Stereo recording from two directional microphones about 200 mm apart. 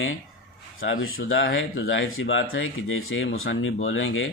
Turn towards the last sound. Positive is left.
turn(degrees=70)  # may be behind; listen again after turning